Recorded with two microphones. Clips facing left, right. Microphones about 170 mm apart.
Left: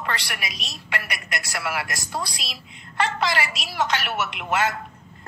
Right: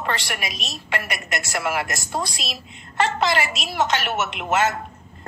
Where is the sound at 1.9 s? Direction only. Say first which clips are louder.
Right 3 dB; 25° right (ahead or behind).